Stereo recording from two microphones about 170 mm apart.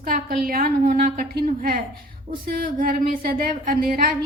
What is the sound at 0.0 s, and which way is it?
A woman's voice, 60° right (ahead or behind).